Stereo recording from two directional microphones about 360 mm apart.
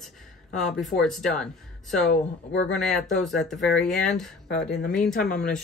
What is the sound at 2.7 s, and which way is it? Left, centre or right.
Speech, centre.